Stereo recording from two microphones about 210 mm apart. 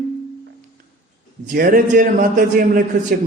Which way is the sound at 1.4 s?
45° right (ahead or behind).